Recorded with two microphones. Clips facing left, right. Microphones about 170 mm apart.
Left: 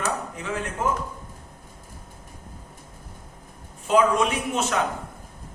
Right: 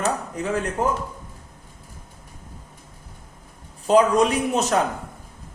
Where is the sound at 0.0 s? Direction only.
40° right (ahead or behind).